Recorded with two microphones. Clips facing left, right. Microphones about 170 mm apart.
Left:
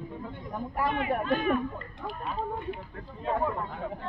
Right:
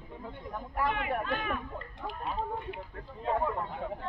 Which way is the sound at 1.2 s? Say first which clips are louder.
Left 7 dB; 35° left (ahead or behind).